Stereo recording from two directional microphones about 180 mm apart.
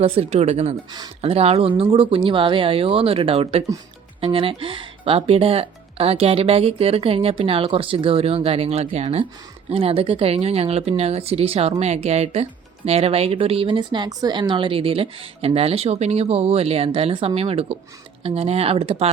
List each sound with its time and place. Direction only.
0.0 s speech: 35° right (ahead or behind)